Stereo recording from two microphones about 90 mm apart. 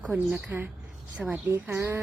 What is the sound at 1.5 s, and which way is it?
Speech, 25° right (ahead or behind).